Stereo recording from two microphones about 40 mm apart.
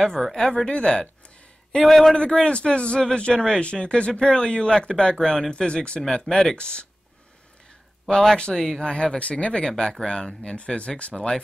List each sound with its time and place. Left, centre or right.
0.0 s speech: centre
1.8 s speech: centre
2.4 s speech: left; by 6.5 s centre
6.5 s speech: left
8.1 s speech: centre
8.8 s speech: left
9.7 s speech: centre; by 11.2 s left